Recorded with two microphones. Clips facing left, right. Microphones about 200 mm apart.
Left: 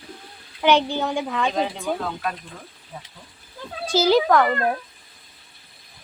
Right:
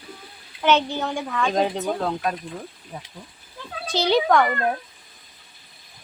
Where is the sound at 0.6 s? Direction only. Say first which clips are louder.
Left 1 dB; 15° left (ahead or behind).